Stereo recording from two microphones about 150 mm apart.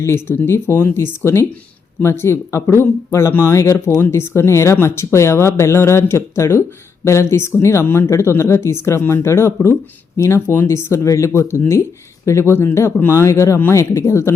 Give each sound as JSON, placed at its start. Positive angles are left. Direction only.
{"t": 0.0, "sound": "speech", "side_deg": 15}